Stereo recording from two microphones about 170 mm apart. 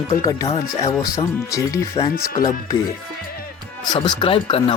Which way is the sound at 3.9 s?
25° left (ahead or behind).